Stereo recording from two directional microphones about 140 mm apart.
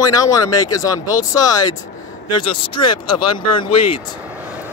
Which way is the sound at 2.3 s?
35° left (ahead or behind).